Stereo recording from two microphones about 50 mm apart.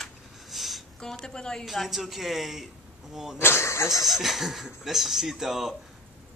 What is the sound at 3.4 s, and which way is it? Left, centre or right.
Speech, left.